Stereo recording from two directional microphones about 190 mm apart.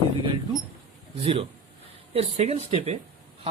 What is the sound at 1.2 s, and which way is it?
Speech, 30° right (ahead or behind).